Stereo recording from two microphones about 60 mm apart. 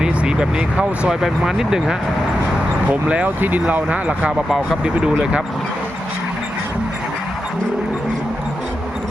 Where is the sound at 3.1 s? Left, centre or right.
Right.